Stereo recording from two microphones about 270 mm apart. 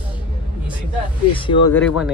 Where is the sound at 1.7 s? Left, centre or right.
Centre.